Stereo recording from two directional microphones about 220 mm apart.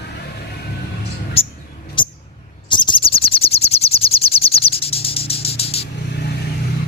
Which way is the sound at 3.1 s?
25° left (ahead or behind).